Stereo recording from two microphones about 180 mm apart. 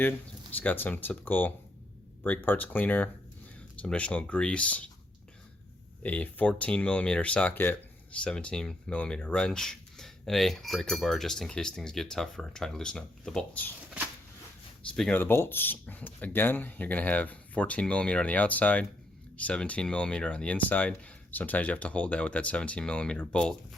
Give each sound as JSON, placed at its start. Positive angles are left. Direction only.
{"t": 0.5, "sound": "speech", "side_deg": 10}
{"t": 6.0, "sound": "speech", "side_deg": 10}
{"t": 14.9, "sound": "speech", "side_deg": 5}